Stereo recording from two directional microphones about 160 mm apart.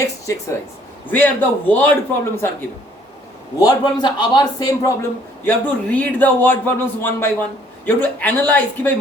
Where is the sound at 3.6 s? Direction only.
25° left (ahead or behind).